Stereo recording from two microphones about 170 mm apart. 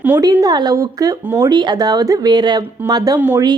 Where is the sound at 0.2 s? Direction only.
20° right (ahead or behind).